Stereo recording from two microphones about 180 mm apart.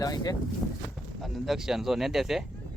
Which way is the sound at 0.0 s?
20° left (ahead or behind).